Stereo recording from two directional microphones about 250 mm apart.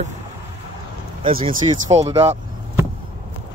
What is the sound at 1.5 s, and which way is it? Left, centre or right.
Speech, right.